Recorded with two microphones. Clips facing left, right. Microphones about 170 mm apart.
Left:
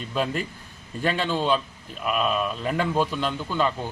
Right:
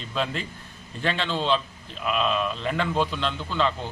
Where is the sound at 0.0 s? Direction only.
10° left (ahead or behind).